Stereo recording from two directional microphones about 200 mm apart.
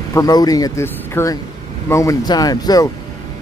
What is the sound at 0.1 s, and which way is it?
Speech, 20° left (ahead or behind).